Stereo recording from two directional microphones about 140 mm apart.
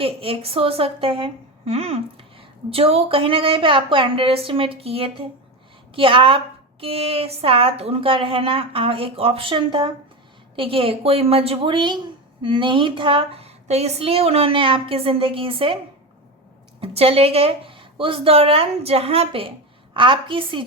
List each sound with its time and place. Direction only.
0.0 s a woman's voice: 40° right (ahead or behind)
16.8 s a woman's voice: 45° right (ahead or behind)